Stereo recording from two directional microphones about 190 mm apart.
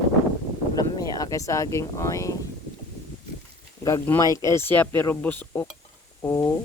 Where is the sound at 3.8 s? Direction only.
15° left (ahead or behind).